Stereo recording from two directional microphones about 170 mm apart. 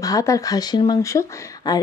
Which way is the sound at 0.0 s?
20° left (ahead or behind).